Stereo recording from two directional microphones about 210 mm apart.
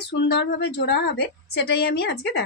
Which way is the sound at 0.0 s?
55° left (ahead or behind).